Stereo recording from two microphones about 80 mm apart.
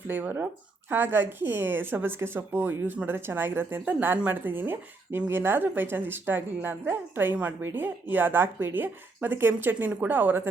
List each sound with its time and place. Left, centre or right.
0.1 s speech: right